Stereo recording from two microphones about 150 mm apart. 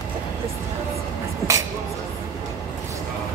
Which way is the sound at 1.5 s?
20° right (ahead or behind).